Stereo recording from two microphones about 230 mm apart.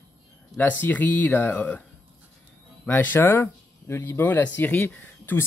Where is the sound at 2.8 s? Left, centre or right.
Centre.